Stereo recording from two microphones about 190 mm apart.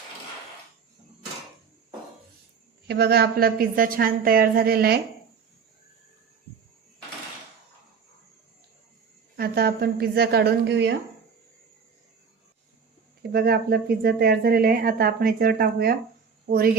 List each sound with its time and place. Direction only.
2.8 s speech: 60° right (ahead or behind)
9.3 s a woman's voice: 55° right (ahead or behind)
13.3 s speech: 55° right (ahead or behind)